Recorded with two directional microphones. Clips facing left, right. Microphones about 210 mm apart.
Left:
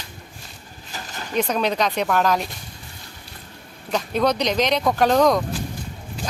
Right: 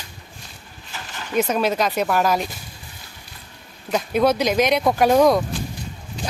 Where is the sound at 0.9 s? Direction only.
40° left (ahead or behind).